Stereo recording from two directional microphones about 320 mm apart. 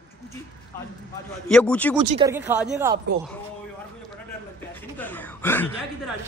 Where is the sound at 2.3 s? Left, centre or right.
Centre.